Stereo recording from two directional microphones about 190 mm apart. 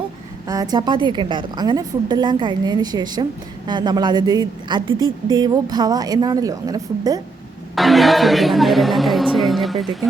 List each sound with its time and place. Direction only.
0.4 s a woman's voice: 20° right (ahead or behind)
7.8 s speech: centre (ahead or behind)